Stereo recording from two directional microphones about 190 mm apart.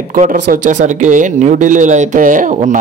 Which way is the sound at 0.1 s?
45° right (ahead or behind).